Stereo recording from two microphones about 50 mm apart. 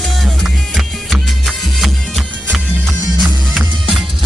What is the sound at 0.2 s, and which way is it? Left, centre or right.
Music, centre.